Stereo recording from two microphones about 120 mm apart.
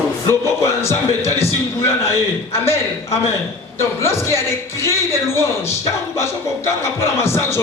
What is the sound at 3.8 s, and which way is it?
Speech, 20° left (ahead or behind).